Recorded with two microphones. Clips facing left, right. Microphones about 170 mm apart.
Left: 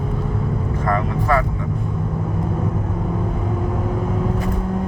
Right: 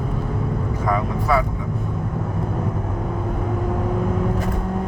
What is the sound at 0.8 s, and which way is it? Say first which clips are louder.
Speech: left 1 dB; 10° right (ahead or behind).